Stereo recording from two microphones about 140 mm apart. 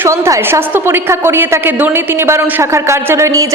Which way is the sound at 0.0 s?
20° right (ahead or behind).